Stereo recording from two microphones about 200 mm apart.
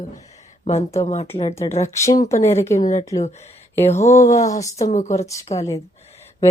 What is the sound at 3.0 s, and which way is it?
Speech, 15° left (ahead or behind).